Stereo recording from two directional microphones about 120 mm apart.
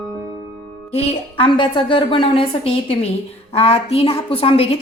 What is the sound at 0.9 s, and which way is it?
A woman's voice, 55° left (ahead or behind).